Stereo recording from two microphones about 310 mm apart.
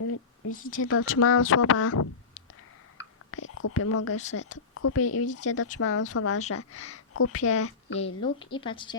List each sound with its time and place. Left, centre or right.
0.0 s a sound: left
0.7 s speech: left
3.0 s whispering: left
4.5 s speech: left
7.9 s speech: centre